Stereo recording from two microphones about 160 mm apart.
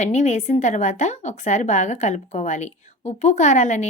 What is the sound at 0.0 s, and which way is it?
A woman's voice, 45° left (ahead or behind).